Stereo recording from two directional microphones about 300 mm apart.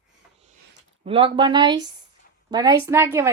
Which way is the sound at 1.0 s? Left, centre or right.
Centre.